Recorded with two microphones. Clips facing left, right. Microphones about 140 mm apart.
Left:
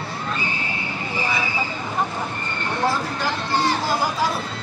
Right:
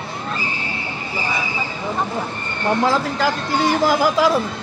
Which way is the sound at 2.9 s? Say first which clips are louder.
Right 5 dB; 90° right.